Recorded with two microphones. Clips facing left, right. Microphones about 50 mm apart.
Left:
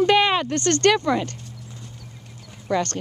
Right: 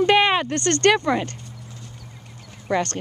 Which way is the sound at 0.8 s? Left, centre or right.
Right.